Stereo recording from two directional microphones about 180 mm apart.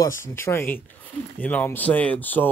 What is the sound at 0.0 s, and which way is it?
Speech, 15° left (ahead or behind).